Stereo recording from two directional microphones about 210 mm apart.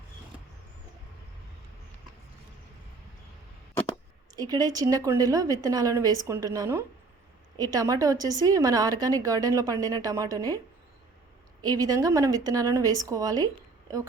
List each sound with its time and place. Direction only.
4.4 s a woman's voice: 20° right (ahead or behind)
11.6 s a woman's voice: 20° right (ahead or behind)